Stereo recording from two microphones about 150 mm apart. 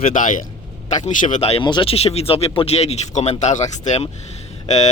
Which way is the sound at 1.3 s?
45° left (ahead or behind).